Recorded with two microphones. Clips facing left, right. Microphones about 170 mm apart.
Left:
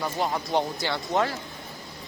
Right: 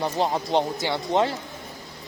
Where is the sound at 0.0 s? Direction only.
25° right (ahead or behind).